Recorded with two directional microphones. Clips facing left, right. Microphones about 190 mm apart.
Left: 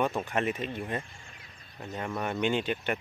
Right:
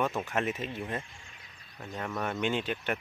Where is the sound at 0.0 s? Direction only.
Centre (ahead or behind).